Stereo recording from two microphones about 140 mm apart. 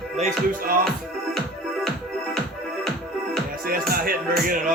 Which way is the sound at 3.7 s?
90° right.